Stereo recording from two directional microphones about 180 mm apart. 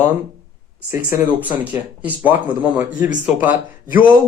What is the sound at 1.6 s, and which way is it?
Speech, 10° right (ahead or behind).